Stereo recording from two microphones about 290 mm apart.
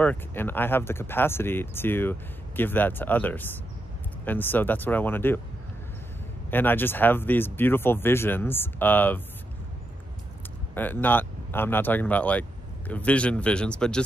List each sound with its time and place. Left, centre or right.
0.0 s speech: centre
6.5 s speech: centre
10.7 s speech: centre